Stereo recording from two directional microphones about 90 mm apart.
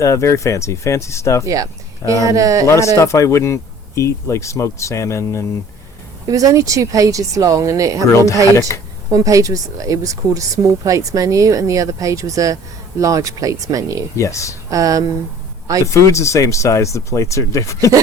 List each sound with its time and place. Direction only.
0.0 s speech: 35° left (ahead or behind)
1.5 s speech: 35° right (ahead or behind)
2.6 s speech: 35° left (ahead or behind)
6.2 s speech: 40° right (ahead or behind)
8.1 s speech: 35° left (ahead or behind)
9.1 s speech: 40° right (ahead or behind)
14.2 s speech: 35° left (ahead or behind)
14.7 s speech: 40° right (ahead or behind)
15.8 s speech: 35° left (ahead or behind)